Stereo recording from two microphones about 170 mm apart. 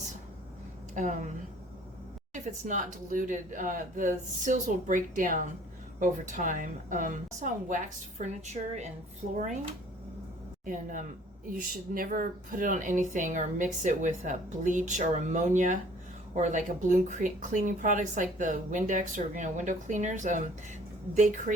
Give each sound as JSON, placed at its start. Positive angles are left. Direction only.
{"t": 0.9, "sound": "speech", "side_deg": -50}
{"t": 2.3, "sound": "speech", "side_deg": -50}
{"t": 10.7, "sound": "speech", "side_deg": -50}